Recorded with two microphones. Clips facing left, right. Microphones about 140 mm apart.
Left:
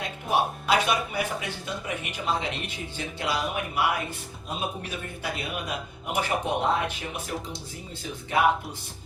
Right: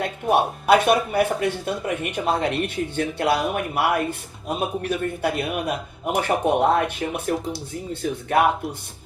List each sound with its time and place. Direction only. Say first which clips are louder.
0.0 s speech: right 6 dB; 55° right (ahead or behind)
8.3 s speech: right 5 dB; 55° right (ahead or behind)